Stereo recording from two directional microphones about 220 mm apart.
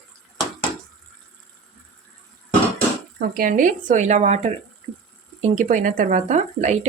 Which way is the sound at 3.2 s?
40° right (ahead or behind).